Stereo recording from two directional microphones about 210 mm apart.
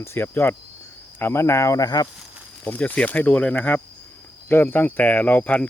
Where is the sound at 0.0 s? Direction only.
10° left (ahead or behind).